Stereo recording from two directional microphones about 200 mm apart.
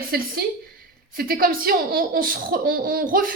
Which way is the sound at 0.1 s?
50° right (ahead or behind).